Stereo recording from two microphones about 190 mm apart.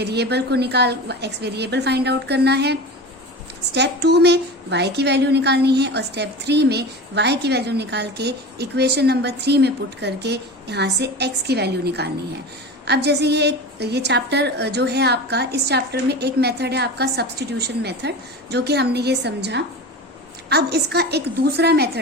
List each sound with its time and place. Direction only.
0.0 s a woman's voice: 60° right (ahead or behind)
3.8 s a woman's voice: 60° right (ahead or behind)